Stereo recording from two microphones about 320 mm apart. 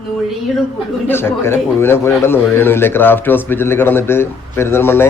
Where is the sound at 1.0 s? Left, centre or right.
Centre.